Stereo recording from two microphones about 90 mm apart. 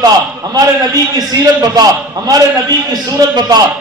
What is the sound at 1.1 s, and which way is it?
Speech, 45° right (ahead or behind).